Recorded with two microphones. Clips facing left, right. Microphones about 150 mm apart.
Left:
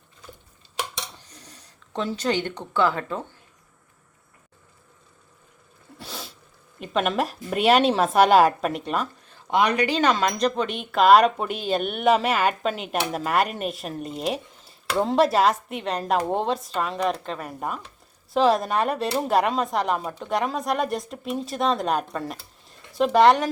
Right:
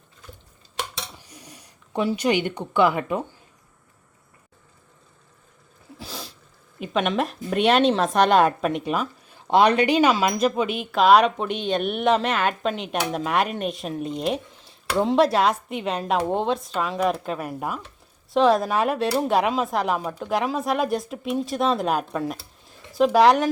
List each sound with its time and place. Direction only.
1.2 s speech: 10° right (ahead or behind)
6.0 s sneeze: centre (ahead or behind)
6.7 s speech: centre (ahead or behind)
9.5 s speech: 30° right (ahead or behind)
9.9 s speech: 5° right (ahead or behind)